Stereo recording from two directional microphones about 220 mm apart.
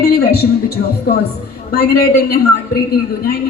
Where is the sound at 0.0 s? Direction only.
45° left (ahead or behind).